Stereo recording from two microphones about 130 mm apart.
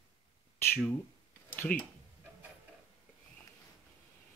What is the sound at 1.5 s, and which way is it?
Speech, 10° left (ahead or behind).